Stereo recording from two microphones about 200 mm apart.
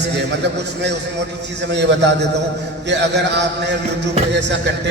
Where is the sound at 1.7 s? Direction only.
60° right (ahead or behind).